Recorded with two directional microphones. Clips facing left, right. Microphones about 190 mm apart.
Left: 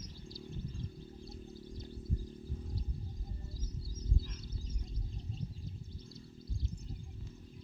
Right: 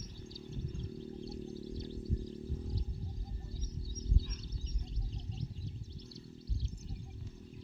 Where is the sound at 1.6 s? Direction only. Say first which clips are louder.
Right 5 dB; 80° right.